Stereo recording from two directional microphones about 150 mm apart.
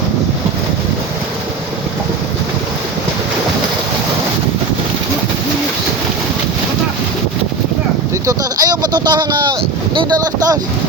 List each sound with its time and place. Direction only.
8.3 s speech: 25° right (ahead or behind)